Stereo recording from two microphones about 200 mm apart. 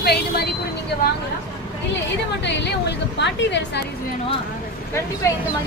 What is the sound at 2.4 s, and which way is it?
Speech, 60° left (ahead or behind).